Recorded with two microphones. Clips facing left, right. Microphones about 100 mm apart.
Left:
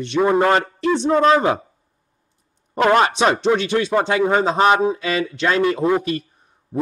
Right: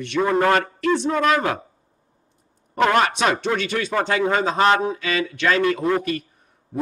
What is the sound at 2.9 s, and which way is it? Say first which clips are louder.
Speech: left 5 dB; 25° left (ahead or behind).